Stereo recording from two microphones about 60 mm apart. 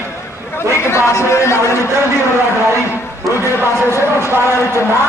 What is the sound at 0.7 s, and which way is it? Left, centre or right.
A man's voice, left.